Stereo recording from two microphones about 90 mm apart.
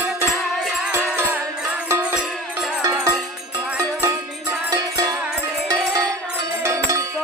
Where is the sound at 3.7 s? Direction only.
30° right (ahead or behind).